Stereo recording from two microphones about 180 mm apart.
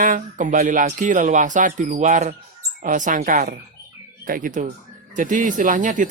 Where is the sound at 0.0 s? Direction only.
45° right (ahead or behind).